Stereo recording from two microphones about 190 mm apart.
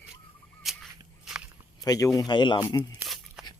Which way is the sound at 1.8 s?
20° left (ahead or behind).